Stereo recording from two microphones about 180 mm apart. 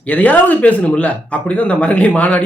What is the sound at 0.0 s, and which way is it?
A man's voice, 10° left (ahead or behind).